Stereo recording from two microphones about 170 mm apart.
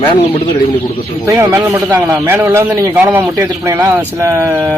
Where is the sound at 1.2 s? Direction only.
15° right (ahead or behind).